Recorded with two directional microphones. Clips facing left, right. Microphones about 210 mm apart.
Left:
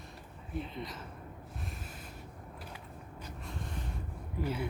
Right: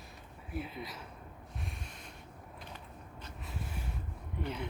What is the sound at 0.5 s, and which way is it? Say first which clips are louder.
Speech: left 1 dB; 5° right (ahead or behind).